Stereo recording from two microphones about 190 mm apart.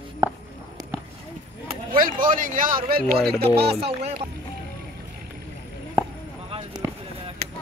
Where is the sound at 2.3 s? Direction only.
45° right (ahead or behind).